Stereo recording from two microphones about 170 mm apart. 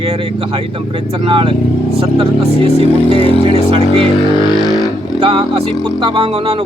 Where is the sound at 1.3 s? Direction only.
30° right (ahead or behind).